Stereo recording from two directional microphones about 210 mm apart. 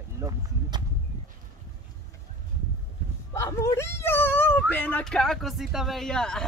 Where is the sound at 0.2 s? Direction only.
20° right (ahead or behind).